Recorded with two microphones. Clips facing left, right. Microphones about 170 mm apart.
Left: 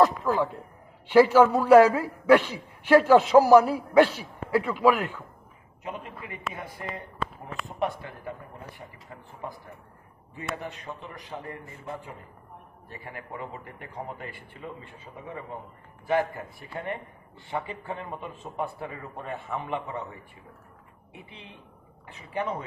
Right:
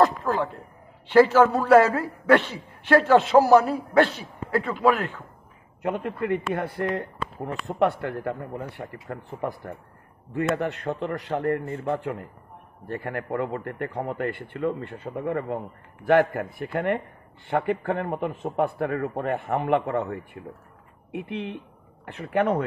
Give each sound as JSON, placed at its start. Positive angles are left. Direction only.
{"t": 0.0, "sound": "a sound", "side_deg": 10}
{"t": 1.0, "sound": "a man's voice", "side_deg": 10}
{"t": 5.8, "sound": "a man's voice", "side_deg": -60}